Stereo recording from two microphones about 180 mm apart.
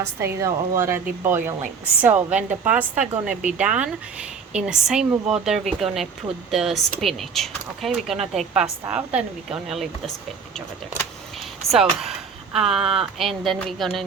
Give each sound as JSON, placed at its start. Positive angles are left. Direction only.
{"t": 0.0, "sound": "a woman's voice", "side_deg": -15}